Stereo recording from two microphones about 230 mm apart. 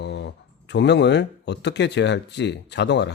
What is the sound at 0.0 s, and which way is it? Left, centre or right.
Speech, left.